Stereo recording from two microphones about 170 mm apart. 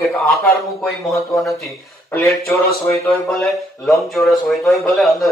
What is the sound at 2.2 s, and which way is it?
Speech, centre (ahead or behind).